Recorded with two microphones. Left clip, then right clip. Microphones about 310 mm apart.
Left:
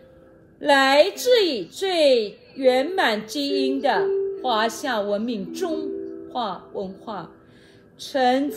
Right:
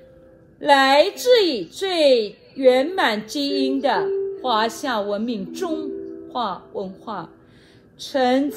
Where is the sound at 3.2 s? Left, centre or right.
Centre.